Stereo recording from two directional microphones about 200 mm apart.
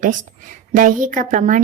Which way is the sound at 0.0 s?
40° right (ahead or behind).